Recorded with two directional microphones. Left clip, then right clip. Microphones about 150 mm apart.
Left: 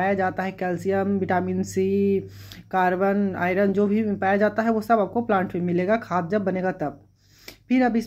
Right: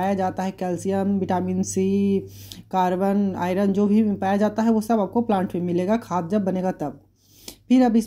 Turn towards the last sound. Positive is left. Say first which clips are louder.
# right 3 dB
turn(degrees=-35)  # may be behind; listen again after turning